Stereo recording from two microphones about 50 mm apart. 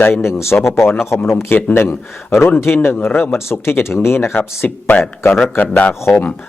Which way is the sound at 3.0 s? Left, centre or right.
Left.